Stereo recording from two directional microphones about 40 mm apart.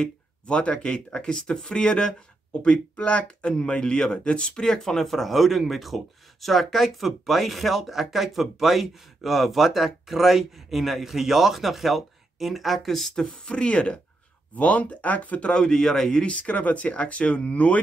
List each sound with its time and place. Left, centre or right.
0.0 s speech: left; by 13.1 s centre
13.3 s speech: left
14.5 s speech: left
15.5 s speech: centre
16.3 s speech: left